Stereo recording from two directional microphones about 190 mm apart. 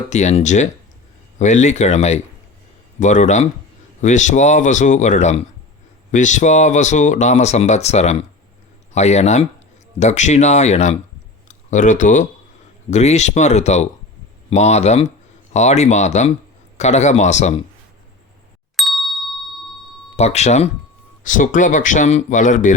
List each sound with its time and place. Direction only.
0.1 s speech: 35° left (ahead or behind)
18.8 s ding: centre (ahead or behind)
20.1 s speech: 35° left (ahead or behind)